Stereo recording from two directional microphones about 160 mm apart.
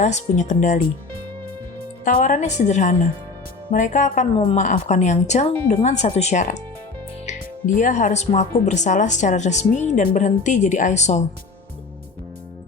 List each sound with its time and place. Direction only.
0.0 s speech: 50° left (ahead or behind)
2.0 s a woman's voice: 55° left (ahead or behind)